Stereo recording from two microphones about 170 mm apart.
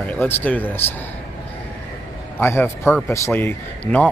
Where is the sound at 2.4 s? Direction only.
15° left (ahead or behind).